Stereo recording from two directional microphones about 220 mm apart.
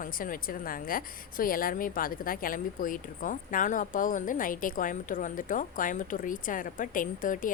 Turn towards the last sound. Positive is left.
turn(degrees=40)  # may be behind; listen again after turning